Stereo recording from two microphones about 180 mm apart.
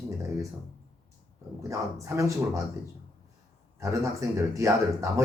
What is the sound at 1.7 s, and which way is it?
Speech, 15° right (ahead or behind).